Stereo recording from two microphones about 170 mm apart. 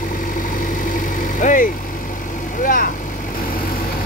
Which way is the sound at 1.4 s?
50° left (ahead or behind).